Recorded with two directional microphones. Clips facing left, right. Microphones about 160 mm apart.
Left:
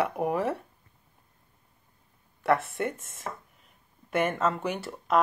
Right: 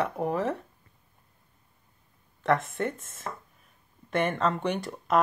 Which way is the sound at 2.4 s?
10° left (ahead or behind).